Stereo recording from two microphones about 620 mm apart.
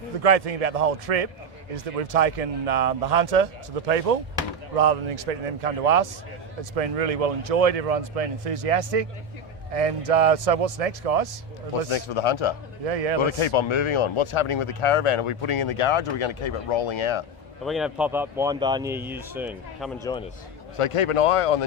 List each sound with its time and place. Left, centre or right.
0.2 s a man's voice: right
11.9 s speech: left
12.8 s speech: right
13.2 s speech: left
17.7 s speech: centre
20.7 s speech: left